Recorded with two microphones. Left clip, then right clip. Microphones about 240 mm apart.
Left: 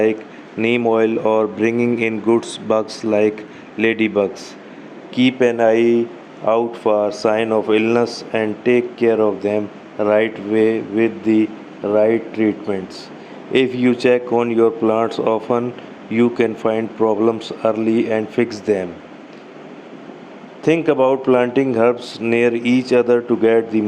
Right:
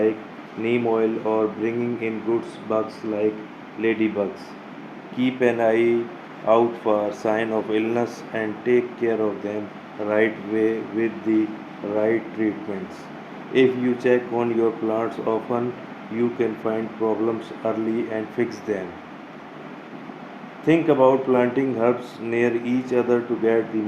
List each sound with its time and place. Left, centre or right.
0.6 s speech: left
5.1 s speech: left
13.5 s speech: left
20.7 s speech: left